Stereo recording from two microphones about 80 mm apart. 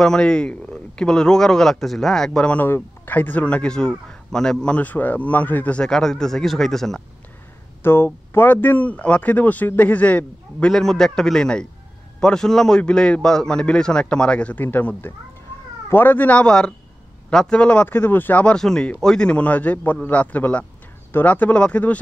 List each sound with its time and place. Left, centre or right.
0.0 s a man's voice: centre
2.5 s speech: left
5.8 s a man's voice: centre
7.8 s speech: left
10.7 s a man's voice: centre
17.9 s a man's voice: left